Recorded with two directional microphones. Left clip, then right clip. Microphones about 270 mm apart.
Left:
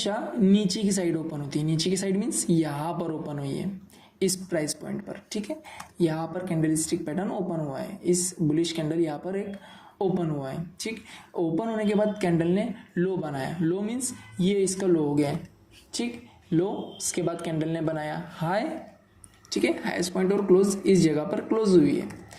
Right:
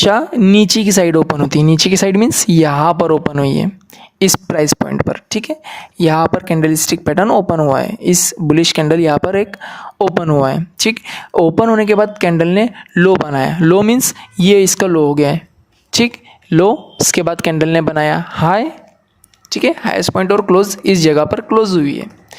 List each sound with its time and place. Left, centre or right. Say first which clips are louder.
0.0 s a woman's voice: right 16 dB; right
16.5 s a woman's voice: right 16 dB; right